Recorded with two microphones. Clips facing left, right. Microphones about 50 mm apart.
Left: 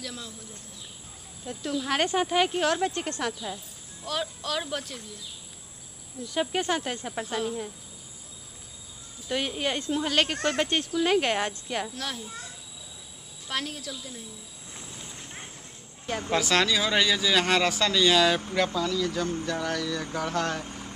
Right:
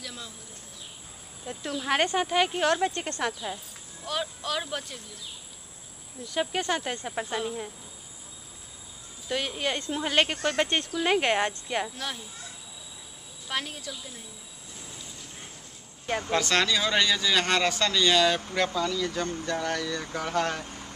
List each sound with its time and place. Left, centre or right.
0.0 s insect: centre
1.4 s speech: centre
2.1 s a man's voice: centre
3.4 s speech: right
4.0 s a man's voice: centre
6.3 s a man's voice: centre
9.3 s a man's voice: centre
9.8 s speech: centre
13.5 s speech: centre
16.3 s a man's voice: centre
20.6 s vehicle: centre